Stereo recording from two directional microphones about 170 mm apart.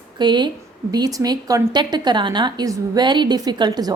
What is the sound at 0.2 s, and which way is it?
A woman's voice, 25° right (ahead or behind).